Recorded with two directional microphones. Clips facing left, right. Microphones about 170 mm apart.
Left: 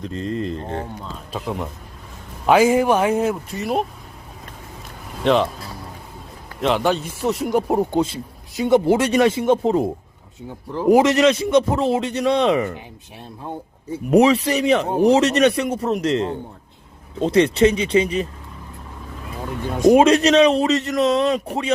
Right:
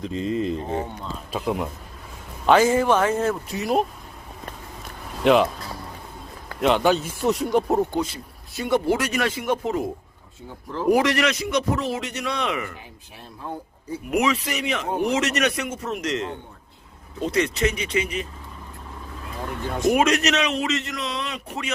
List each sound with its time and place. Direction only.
0.0 s a man's voice: centre (ahead or behind)
2.5 s speech: 10° left (ahead or behind)
3.5 s speech: centre (ahead or behind)
5.2 s speech: 5° right (ahead or behind)
6.6 s speech: centre (ahead or behind)
7.4 s speech: 10° left (ahead or behind)
7.9 s a man's voice: 25° left (ahead or behind)
10.7 s a man's voice: 15° left (ahead or behind)
14.1 s speech: 35° left (ahead or behind)
19.6 s speech: 15° left (ahead or behind)
20.0 s speech: 30° left (ahead or behind)